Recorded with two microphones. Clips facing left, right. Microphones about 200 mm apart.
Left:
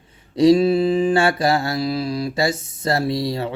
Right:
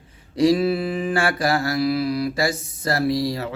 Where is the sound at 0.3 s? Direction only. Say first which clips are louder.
Left 4 dB; 25° left (ahead or behind).